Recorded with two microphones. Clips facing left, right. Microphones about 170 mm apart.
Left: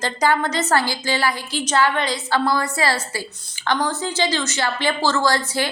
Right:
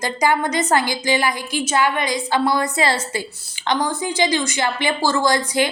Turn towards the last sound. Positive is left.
turn(degrees=-15)  # may be behind; listen again after turning